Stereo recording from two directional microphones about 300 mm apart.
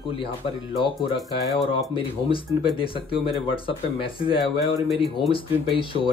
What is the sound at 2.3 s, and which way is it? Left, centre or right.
Speech, centre.